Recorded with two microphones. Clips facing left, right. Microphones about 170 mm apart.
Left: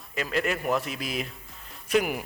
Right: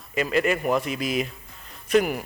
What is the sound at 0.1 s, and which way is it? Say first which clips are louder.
Speech: right 5 dB; centre (ahead or behind).